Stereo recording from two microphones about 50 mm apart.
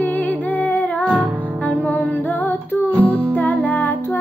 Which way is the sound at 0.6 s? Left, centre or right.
Left.